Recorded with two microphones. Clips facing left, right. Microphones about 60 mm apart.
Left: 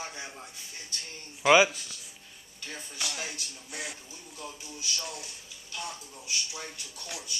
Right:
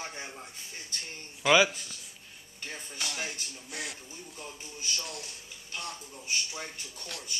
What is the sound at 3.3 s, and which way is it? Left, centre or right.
Music, centre.